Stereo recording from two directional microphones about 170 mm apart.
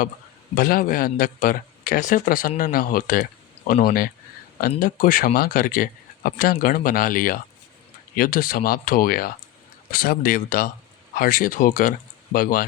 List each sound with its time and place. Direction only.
0.5 s speech: 55° left (ahead or behind)